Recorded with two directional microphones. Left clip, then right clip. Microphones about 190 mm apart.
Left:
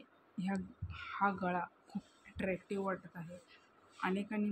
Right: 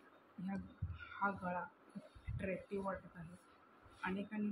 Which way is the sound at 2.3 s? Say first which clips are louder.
Left 5 dB; 65° left (ahead or behind).